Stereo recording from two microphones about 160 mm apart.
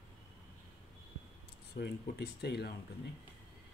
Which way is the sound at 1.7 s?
90° left.